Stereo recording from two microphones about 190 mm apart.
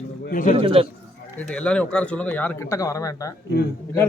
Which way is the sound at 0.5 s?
30° right (ahead or behind).